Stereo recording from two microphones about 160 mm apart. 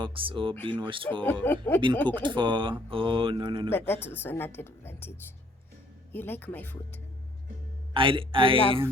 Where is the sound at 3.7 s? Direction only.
15° left (ahead or behind).